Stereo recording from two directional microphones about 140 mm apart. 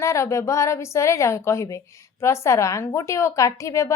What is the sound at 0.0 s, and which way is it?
A woman's voice, 20° left (ahead or behind).